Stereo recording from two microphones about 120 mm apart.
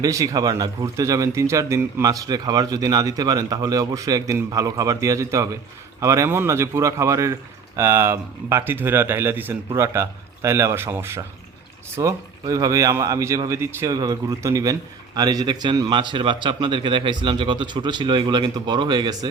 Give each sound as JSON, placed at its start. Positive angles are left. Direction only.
{"t": 0.0, "sound": "speech", "side_deg": -30}